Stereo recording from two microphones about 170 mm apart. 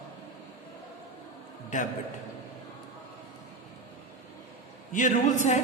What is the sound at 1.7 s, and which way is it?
Speech, 50° left (ahead or behind).